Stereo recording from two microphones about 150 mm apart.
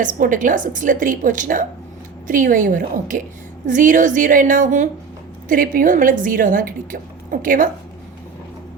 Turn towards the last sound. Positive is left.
turn(degrees=-65)  # may be behind; listen again after turning